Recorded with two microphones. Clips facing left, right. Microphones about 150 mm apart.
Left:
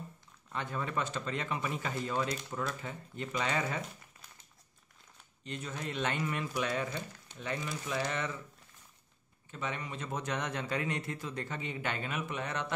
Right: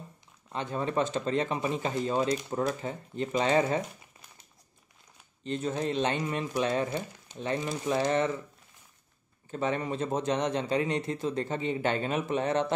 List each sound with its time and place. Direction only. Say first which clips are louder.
0.5 s speech: right 5 dB; 25° right (ahead or behind)
5.4 s speech: right 10 dB; 30° right (ahead or behind)
9.5 s speech: right 9 dB; 35° right (ahead or behind)